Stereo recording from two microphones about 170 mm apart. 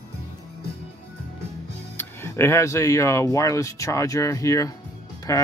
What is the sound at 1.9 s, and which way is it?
Speech, 15° left (ahead or behind).